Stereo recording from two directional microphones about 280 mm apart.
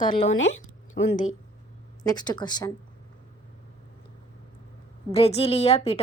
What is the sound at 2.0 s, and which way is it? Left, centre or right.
Speech, centre.